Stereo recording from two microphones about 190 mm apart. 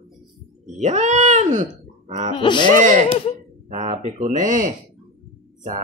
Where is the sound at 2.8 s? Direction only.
40° right (ahead or behind).